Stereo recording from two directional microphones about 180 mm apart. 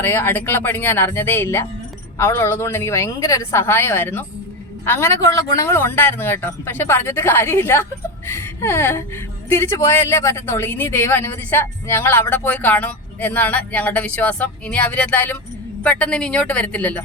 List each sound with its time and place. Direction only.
0.0 s speech: 10° left (ahead or behind)